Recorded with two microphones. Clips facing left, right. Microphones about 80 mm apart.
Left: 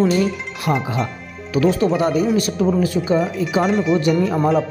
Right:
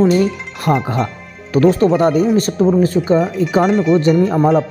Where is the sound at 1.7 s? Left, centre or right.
Right.